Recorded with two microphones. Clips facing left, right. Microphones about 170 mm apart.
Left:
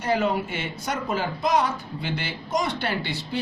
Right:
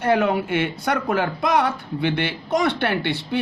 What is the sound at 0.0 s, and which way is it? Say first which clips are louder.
Speech: right 4 dB; 60° right (ahead or behind).